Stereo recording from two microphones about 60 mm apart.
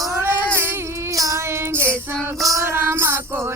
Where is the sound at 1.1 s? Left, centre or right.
Right.